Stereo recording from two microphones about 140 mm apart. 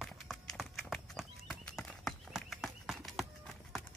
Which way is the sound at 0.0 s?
Centre (ahead or behind).